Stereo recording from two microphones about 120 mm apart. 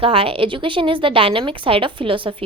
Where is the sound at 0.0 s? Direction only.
50° right (ahead or behind).